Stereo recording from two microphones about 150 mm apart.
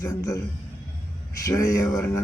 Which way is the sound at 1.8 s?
10° left (ahead or behind).